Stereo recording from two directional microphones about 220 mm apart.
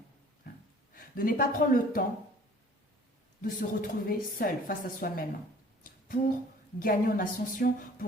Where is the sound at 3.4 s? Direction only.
40° left (ahead or behind).